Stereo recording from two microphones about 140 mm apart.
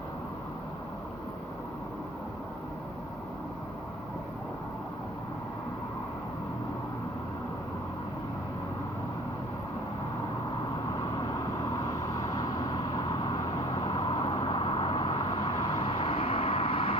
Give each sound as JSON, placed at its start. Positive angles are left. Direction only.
{"t": 11.9, "sound": "vehicle", "side_deg": 25}